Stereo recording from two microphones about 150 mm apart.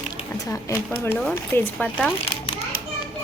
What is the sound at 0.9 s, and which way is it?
A child's voice, 15° left (ahead or behind).